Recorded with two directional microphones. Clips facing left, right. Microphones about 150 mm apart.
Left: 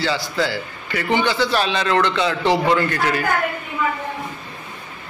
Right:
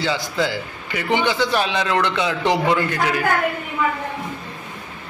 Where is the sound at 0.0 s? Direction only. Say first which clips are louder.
Even; 20° right (ahead or behind).